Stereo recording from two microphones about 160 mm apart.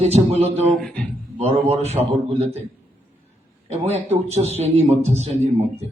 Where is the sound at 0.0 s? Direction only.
40° right (ahead or behind).